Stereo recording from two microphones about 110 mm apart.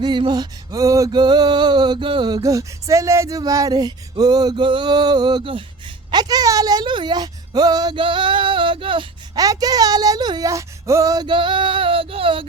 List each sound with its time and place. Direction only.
0.0 s male singing: 45° right (ahead or behind)
6.1 s speech: 40° right (ahead or behind)
9.3 s male singing: 35° right (ahead or behind); by 12.5 s 55° right (ahead or behind)